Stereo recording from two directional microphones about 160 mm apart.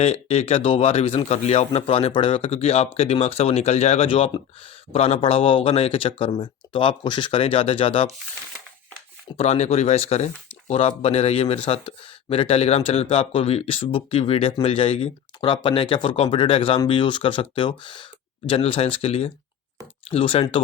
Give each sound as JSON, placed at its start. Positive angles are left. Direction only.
{"t": 0.0, "sound": "a man's voice", "side_deg": 40}
{"t": 9.4, "sound": "a man's voice", "side_deg": 45}